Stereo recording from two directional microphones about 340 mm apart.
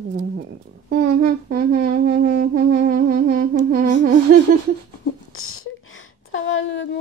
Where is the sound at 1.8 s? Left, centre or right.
Right.